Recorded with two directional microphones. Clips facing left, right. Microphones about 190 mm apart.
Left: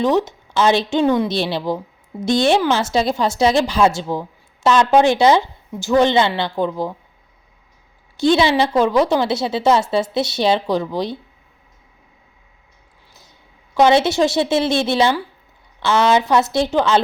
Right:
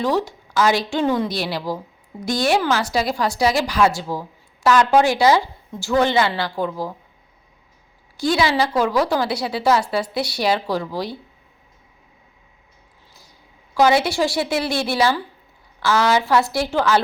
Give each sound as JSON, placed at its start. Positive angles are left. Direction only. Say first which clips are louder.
{"t": 0.0, "sound": "a woman's voice", "louder": "left 4 dB", "side_deg": 20}
{"t": 8.1, "sound": "a woman's voice", "louder": "left 4 dB", "side_deg": 25}
{"t": 13.7, "sound": "a woman's voice", "louder": "left 3 dB", "side_deg": 25}